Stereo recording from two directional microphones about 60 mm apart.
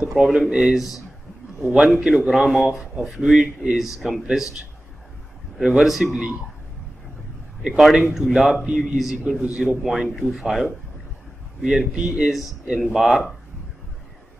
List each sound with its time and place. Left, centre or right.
0.1 s speech: centre
0.7 s a man's voice: centre
3.2 s speech: centre
4.0 s a man's voice: centre
5.6 s speech: centre
7.6 s a man's voice: centre
9.8 s a man's voice: centre
11.6 s speech: centre
12.9 s speech: centre